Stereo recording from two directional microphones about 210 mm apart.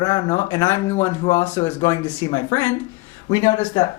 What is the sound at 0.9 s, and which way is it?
Speech, 35° left (ahead or behind).